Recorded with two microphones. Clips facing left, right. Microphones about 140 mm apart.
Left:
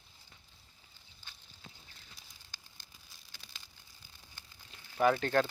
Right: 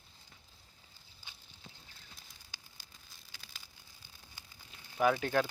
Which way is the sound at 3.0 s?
Centre (ahead or behind).